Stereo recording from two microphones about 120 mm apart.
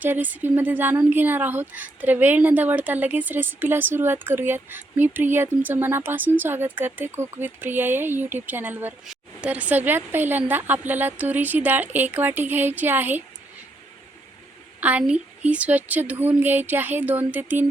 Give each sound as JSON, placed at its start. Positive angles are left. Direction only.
{"t": 0.0, "sound": "a woman's voice", "side_deg": -15}
{"t": 14.8, "sound": "speech", "side_deg": -15}